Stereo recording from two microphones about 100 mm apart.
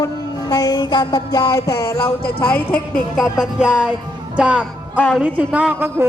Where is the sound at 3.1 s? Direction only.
5° right (ahead or behind).